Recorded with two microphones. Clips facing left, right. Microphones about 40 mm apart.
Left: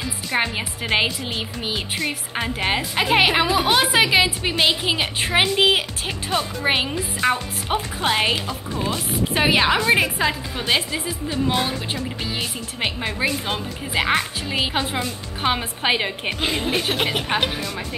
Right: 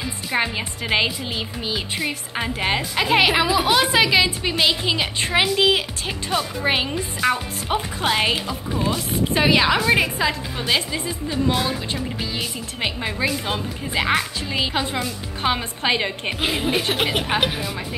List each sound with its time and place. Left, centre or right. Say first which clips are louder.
0.4 s a woman's voice: even; centre
11.9 s a woman's voice: even; centre
16.3 s a woman's voice: right 1 dB; centre